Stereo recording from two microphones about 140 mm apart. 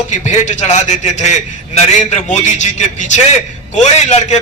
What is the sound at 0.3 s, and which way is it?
A man's voice, 55° left (ahead or behind).